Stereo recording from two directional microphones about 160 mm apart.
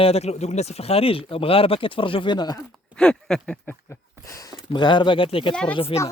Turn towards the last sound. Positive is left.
turn(degrees=35)  # may be behind; listen again after turning